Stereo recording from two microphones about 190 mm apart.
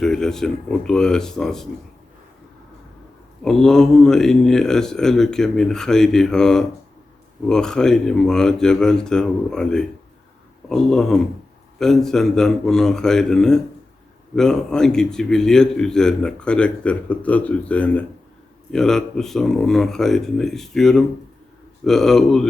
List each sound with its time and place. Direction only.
0.0 s a man's voice: 5° left (ahead or behind)
3.4 s a man's voice: centre (ahead or behind)